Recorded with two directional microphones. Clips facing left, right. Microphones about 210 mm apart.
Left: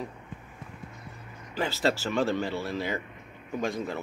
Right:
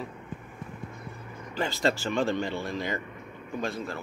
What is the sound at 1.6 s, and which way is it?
Speech, 5° left (ahead or behind).